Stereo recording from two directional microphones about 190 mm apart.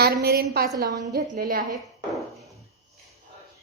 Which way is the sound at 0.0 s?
55° right (ahead or behind).